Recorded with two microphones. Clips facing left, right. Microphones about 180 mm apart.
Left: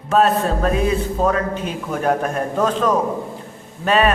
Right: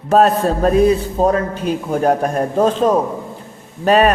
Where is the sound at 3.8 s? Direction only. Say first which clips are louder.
Right 4 dB; 40° right (ahead or behind).